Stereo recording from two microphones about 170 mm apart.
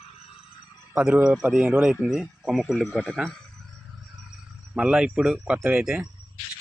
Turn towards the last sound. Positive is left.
turn(degrees=-5)  # may be behind; listen again after turning